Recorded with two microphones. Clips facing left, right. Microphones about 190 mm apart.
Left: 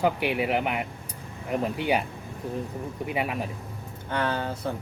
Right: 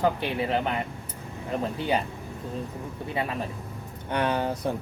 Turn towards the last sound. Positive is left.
turn(degrees=-15)  # may be behind; listen again after turning